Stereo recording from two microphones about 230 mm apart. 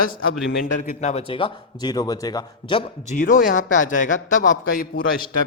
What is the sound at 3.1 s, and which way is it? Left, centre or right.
A man's voice, left.